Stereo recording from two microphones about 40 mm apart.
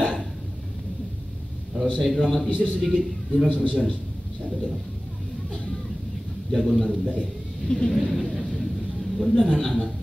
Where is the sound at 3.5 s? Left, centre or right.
Left.